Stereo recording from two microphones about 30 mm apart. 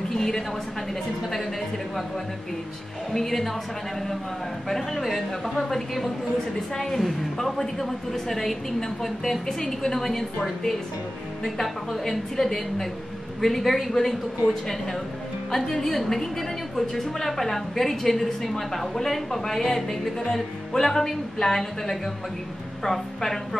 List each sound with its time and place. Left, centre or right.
0.1 s a woman's voice: centre
3.1 s a woman's voice: centre
4.9 s a woman's voice: centre
6.3 s a woman's voice: centre
7.8 s a woman's voice: centre
12.1 s a woman's voice: centre
20.3 s music: centre
21.1 s a woman's voice: centre